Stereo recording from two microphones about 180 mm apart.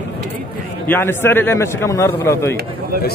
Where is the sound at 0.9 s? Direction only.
10° left (ahead or behind).